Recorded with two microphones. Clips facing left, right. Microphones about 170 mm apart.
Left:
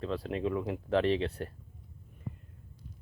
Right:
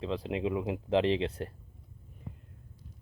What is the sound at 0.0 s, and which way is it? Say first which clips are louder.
Speech: right 1 dB; 20° right (ahead or behind).